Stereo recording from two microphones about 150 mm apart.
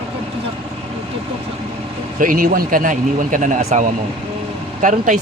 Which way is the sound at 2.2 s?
60° right (ahead or behind).